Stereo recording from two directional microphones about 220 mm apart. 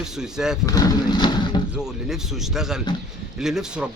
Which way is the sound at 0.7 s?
15° left (ahead or behind).